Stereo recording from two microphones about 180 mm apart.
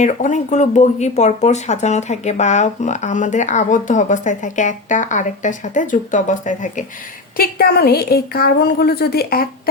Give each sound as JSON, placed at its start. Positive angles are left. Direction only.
{"t": 0.0, "sound": "speech", "side_deg": 40}
{"t": 7.3, "sound": "a woman's voice", "side_deg": 60}